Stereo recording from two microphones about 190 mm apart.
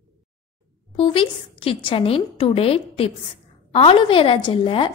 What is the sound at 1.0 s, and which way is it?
A woman's voice, 30° left (ahead or behind).